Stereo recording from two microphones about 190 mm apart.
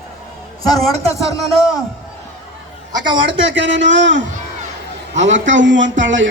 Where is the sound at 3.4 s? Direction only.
70° right (ahead or behind).